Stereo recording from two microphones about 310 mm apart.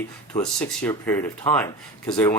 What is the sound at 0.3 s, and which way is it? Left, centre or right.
Speech, centre.